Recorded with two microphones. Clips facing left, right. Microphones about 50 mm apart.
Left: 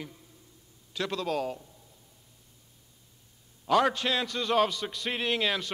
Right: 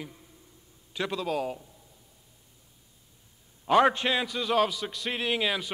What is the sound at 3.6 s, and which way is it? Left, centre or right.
Speech, right.